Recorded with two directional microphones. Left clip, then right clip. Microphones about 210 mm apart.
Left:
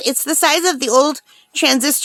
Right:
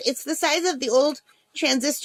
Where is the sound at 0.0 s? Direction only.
35° left (ahead or behind).